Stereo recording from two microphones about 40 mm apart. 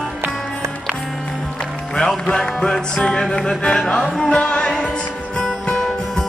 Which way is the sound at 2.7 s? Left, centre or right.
Left.